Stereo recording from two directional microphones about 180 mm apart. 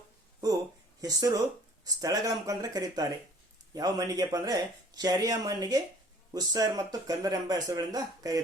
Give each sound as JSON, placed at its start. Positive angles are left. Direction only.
{"t": 1.0, "sound": "speech", "side_deg": -20}